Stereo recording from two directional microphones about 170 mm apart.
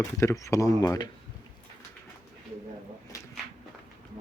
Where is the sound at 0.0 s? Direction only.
20° left (ahead or behind).